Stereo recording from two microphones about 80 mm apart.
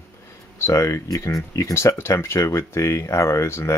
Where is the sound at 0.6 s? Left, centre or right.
Left.